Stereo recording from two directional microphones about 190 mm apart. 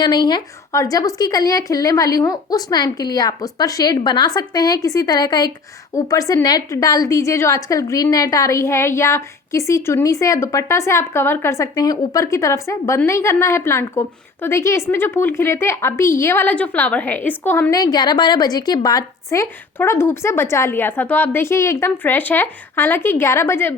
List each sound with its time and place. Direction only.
0.0 s a woman's voice: 20° left (ahead or behind)